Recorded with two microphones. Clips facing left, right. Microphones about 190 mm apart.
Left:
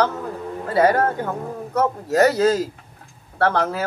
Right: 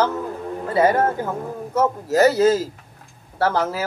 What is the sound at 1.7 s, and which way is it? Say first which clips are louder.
Speech: even; 5° right (ahead or behind).